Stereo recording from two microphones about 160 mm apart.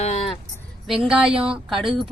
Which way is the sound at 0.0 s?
45° left (ahead or behind).